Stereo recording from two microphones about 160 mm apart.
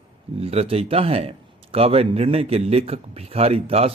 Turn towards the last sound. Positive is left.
turn(degrees=-40)  # may be behind; listen again after turning